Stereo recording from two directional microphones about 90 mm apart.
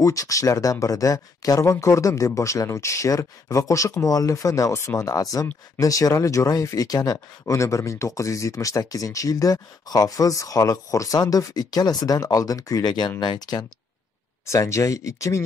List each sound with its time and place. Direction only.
0.0 s speech: 40° left (ahead or behind)
14.4 s speech: 35° left (ahead or behind)